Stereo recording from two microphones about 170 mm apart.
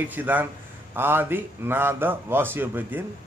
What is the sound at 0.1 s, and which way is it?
A man's voice, 10° right (ahead or behind).